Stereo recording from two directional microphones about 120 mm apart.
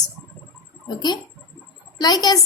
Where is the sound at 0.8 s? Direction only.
35° left (ahead or behind).